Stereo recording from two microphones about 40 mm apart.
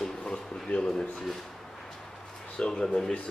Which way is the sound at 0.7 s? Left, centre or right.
Left.